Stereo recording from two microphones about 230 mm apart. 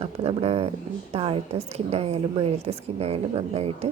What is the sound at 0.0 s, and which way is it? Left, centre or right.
A woman's voice, right.